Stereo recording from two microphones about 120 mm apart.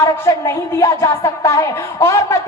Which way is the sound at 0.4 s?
25° left (ahead or behind).